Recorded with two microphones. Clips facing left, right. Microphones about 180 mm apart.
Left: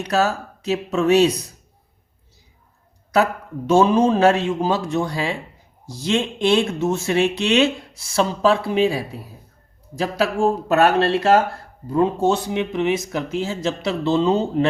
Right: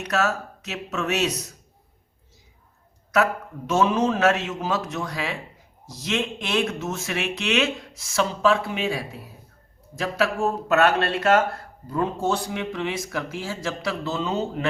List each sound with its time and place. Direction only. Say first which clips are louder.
0.0 s a man's voice: left 4 dB; 30° left (ahead or behind)
3.7 s a man's voice: left 6 dB; 30° left (ahead or behind)